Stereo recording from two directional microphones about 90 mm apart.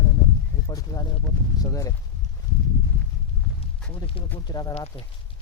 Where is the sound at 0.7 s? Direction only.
40° left (ahead or behind).